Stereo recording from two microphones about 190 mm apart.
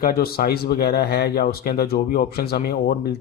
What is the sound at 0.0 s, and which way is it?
Speech, 55° left (ahead or behind).